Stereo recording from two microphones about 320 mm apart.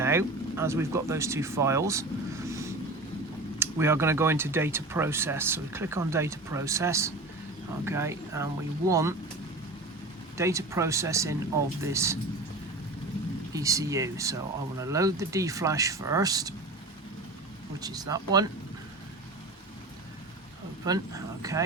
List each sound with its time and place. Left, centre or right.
0.0 s speech: centre
10.3 s speech: centre
13.5 s speech: centre
17.7 s speech: centre
20.8 s speech: centre